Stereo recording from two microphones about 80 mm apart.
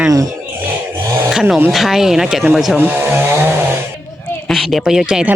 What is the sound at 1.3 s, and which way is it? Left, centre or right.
Speech, centre.